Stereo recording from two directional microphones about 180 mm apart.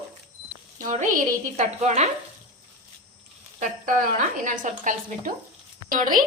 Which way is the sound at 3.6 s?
50° right (ahead or behind).